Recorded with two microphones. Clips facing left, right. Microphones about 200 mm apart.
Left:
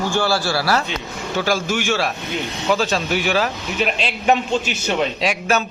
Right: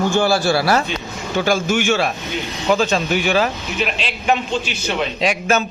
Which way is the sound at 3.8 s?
40° left (ahead or behind).